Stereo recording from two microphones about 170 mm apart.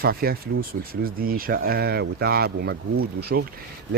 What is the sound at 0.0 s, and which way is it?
Speech, 65° right (ahead or behind).